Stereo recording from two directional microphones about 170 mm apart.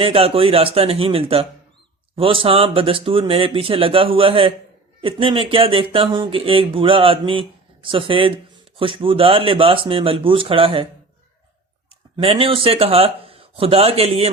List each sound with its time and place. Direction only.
0.0 s speech: 35° right (ahead or behind)
12.1 s speech: 30° right (ahead or behind)